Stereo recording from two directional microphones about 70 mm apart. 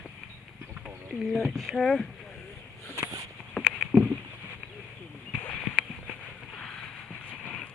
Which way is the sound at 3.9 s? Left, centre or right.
Centre.